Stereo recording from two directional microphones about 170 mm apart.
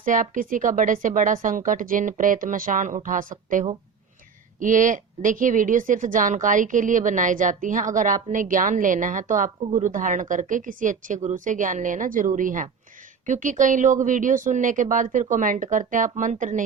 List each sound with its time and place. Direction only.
0.0 s speech: 50° right (ahead or behind)